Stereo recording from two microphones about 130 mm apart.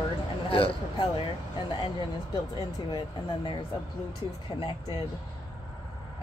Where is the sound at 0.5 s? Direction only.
45° left (ahead or behind).